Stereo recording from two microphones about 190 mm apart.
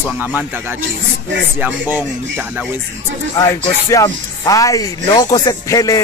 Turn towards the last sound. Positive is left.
turn(degrees=20)  # may be behind; listen again after turning